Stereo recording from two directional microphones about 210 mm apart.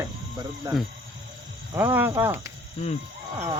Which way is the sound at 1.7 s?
10° right (ahead or behind).